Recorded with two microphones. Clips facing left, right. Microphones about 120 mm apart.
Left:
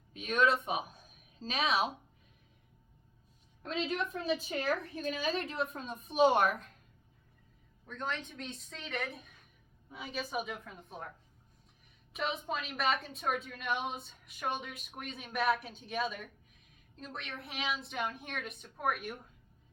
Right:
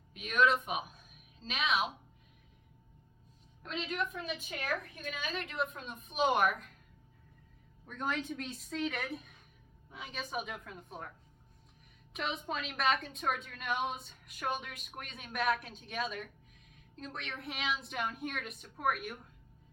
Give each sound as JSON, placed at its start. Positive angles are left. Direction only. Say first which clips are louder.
{"t": 0.1, "sound": "speech", "louder": "even", "side_deg": 35}
{"t": 3.6, "sound": "a woman's voice", "louder": "left 2 dB", "side_deg": 35}
{"t": 7.9, "sound": "a woman's voice", "louder": "right 3 dB", "side_deg": -10}
{"t": 12.1, "sound": "a woman's voice", "louder": "left 2 dB", "side_deg": 0}